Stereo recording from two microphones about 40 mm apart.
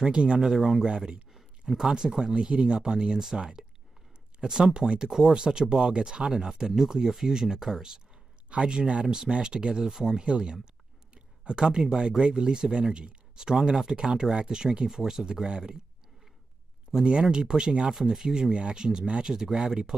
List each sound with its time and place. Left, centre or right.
0.0 s speech: right
0.4 s speech: centre
0.8 s speech: right
1.3 s speech: centre
4.7 s speech: right
8.5 s speech: right
17.0 s speech: right